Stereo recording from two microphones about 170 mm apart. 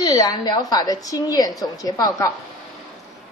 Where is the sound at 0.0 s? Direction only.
25° left (ahead or behind).